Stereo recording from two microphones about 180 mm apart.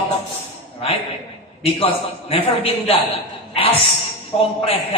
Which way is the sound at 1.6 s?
35° left (ahead or behind).